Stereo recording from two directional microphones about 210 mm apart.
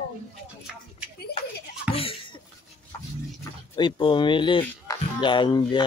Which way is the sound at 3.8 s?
20° left (ahead or behind).